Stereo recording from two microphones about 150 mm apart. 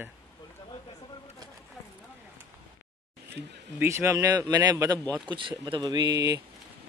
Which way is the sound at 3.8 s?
20° right (ahead or behind).